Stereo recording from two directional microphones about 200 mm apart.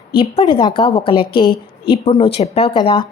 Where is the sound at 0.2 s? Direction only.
25° left (ahead or behind).